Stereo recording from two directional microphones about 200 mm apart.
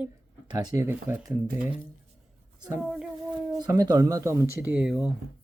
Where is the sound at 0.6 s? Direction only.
15° right (ahead or behind).